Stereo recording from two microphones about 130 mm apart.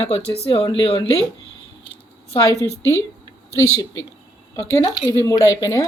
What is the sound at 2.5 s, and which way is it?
Speech, 25° right (ahead or behind).